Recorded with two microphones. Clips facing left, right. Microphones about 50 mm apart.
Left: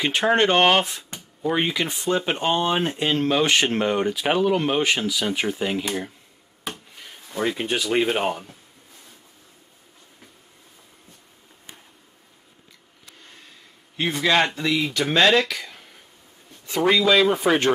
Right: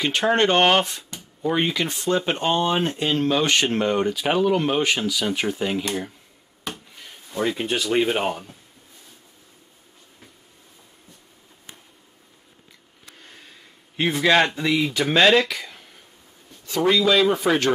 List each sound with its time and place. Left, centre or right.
0.0 s speech: centre
14.1 s speech: centre
16.6 s a sound: left
16.9 s speech: centre
17.4 s speech: left